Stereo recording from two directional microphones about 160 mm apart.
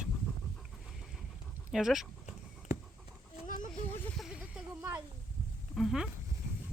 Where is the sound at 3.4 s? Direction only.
55° left (ahead or behind).